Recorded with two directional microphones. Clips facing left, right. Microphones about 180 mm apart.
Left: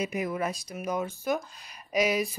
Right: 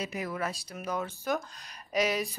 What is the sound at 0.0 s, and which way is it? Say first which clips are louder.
Speech: left 4 dB; 15° left (ahead or behind).